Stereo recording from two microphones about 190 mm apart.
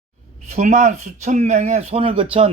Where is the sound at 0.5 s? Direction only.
40° right (ahead or behind).